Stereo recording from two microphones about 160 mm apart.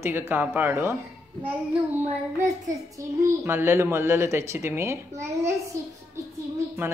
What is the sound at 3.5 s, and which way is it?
A child's voice, 15° right (ahead or behind).